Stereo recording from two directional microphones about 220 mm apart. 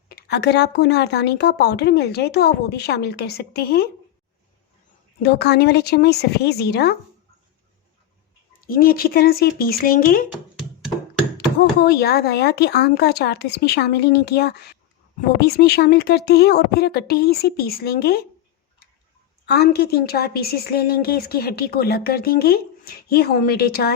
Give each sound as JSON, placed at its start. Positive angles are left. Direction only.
{"t": 0.1, "sound": "a woman's voice", "side_deg": 45}
{"t": 5.2, "sound": "a woman's voice", "side_deg": 45}
{"t": 8.6, "sound": "a woman's voice", "side_deg": 40}
{"t": 10.6, "sound": "music", "side_deg": 0}
{"t": 11.3, "sound": "a woman's voice", "side_deg": 45}
{"t": 19.5, "sound": "a woman's voice", "side_deg": 45}